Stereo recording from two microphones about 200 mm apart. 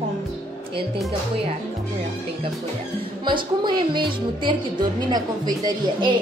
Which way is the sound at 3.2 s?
25° right (ahead or behind).